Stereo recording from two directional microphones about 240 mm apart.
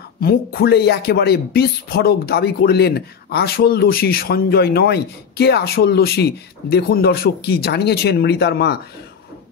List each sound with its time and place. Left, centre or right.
0.2 s speech: left